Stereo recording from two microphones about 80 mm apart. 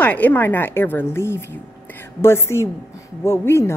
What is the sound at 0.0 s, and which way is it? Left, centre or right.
A woman's voice, left.